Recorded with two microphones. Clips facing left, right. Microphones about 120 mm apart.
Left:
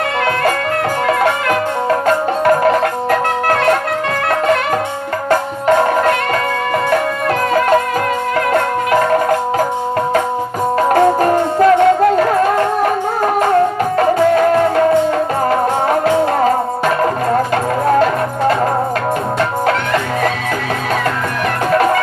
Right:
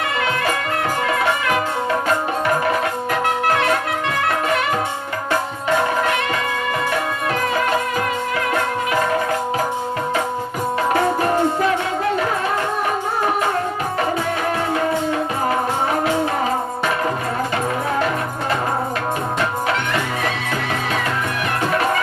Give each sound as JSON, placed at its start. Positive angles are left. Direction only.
{"t": 3.1, "sound": "music", "side_deg": 50}
{"t": 10.8, "sound": "music", "side_deg": 45}